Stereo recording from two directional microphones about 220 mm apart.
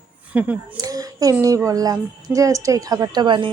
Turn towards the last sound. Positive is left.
turn(degrees=-20)  # may be behind; listen again after turning